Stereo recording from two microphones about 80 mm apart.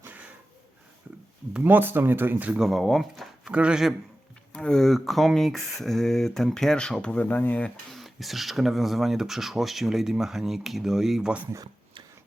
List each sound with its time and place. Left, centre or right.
0.0 s a sound: right
1.6 s speech: right
2.5 s speech: centre
3.5 s a man's voice: centre
4.5 s speech: centre
7.9 s speech: centre